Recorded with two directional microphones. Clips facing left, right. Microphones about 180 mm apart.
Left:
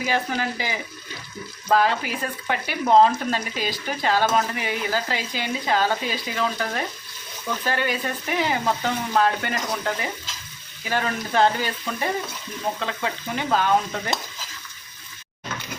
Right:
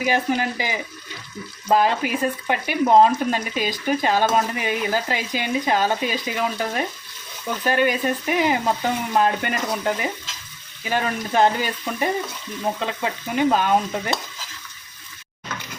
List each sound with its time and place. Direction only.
0.0 s speech: 15° right (ahead or behind)